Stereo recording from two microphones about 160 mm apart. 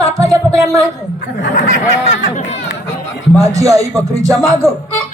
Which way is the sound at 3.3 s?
20° right (ahead or behind).